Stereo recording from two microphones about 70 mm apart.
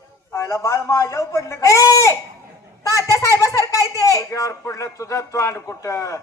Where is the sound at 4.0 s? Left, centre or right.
Left.